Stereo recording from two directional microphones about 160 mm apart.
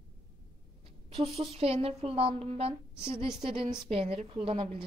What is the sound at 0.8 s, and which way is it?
A woman's voice, 35° right (ahead or behind).